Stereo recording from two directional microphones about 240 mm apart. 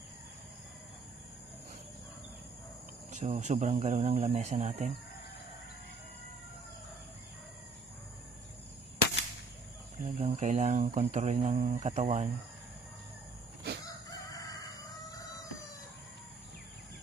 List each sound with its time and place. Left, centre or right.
3.1 s speech: right
9.9 s speech: right